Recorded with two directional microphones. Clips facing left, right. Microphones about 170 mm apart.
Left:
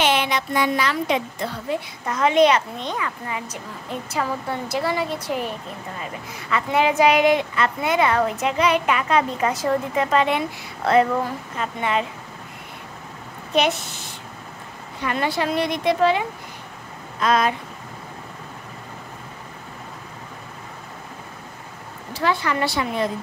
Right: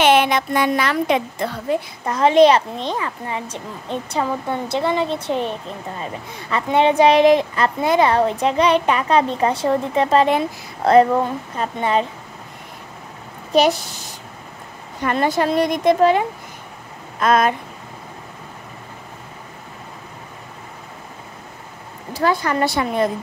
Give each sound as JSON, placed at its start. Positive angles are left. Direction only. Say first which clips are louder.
{"t": 0.0, "sound": "speech", "louder": "right 6 dB", "side_deg": -55}
{"t": 2.0, "sound": "a woman's voice", "louder": "right 4 dB", "side_deg": -35}
{"t": 13.5, "sound": "speech", "louder": "right 5 dB", "side_deg": -35}
{"t": 22.2, "sound": "speech", "louder": "right 3 dB", "side_deg": -45}